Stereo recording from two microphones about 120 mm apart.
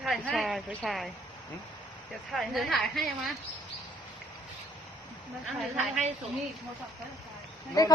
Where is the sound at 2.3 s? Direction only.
Centre (ahead or behind).